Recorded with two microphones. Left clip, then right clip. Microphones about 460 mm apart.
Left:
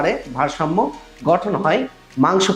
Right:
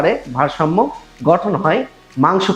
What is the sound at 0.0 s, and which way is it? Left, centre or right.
Speech, right.